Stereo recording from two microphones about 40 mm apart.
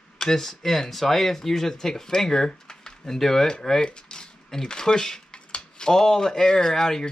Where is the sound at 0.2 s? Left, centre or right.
Centre.